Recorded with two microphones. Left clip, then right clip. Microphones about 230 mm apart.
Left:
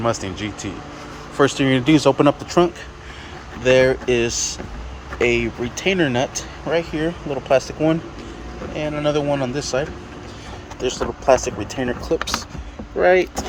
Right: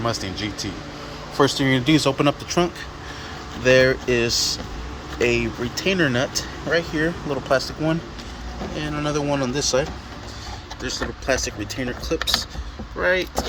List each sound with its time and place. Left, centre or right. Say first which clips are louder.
0.0 s speech: left 3 dB; centre
10.9 s speech: left 7 dB; left
11.8 s speech: left 5 dB; left